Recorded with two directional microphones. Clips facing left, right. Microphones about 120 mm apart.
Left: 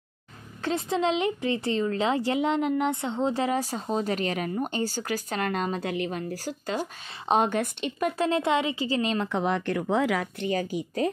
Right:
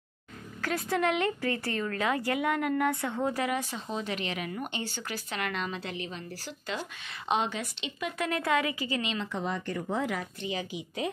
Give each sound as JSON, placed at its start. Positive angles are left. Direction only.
{"t": 0.6, "sound": "a woman's voice", "side_deg": 25}
{"t": 8.2, "sound": "a woman's voice", "side_deg": 25}
{"t": 9.1, "sound": "speech", "side_deg": 60}
{"t": 10.4, "sound": "speech", "side_deg": 50}